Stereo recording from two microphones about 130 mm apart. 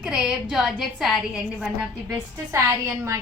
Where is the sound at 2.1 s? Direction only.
20° right (ahead or behind).